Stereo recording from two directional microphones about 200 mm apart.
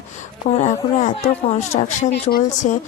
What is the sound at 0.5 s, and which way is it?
Speech, 35° left (ahead or behind).